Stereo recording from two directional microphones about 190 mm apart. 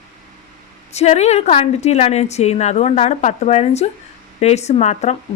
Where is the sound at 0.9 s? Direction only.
35° left (ahead or behind).